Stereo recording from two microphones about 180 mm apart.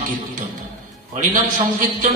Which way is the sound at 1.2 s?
45° right (ahead or behind).